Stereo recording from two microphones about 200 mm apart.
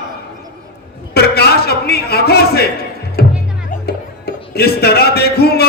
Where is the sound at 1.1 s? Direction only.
50° left (ahead or behind).